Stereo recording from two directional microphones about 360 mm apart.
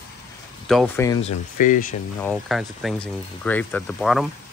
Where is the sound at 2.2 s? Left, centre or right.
Centre.